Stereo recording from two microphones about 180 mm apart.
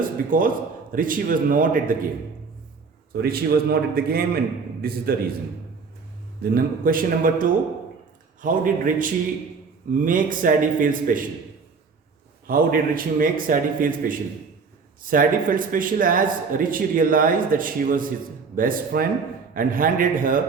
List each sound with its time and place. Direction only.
0.0 s a man's voice: 50° right (ahead or behind)
3.1 s a man's voice: 60° right (ahead or behind)
6.4 s speech: 55° right (ahead or behind)
12.5 s speech: 50° right (ahead or behind)